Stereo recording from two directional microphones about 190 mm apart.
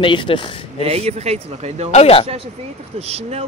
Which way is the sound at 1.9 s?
30° left (ahead or behind).